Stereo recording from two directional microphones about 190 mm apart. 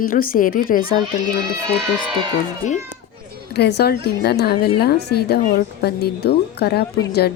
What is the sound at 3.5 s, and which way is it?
Speech, 60° left (ahead or behind).